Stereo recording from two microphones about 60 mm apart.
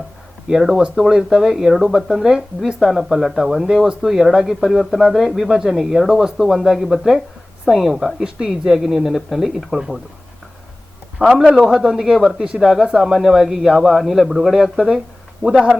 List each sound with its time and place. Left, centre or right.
0.4 s speech: centre
11.2 s a man's voice: left
11.6 s speech: centre